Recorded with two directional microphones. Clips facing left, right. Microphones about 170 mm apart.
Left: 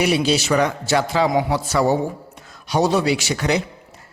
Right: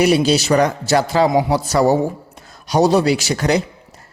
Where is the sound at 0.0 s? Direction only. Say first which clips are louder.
Right 4 dB; 40° right (ahead or behind).